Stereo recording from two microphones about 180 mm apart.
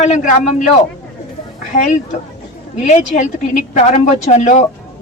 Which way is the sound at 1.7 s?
45° left (ahead or behind).